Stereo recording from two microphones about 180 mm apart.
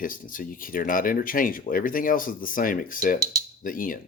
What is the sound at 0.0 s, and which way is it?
Speech, 50° left (ahead or behind).